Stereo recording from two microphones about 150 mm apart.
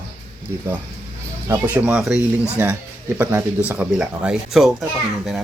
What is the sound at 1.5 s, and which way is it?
Speech, 10° right (ahead or behind).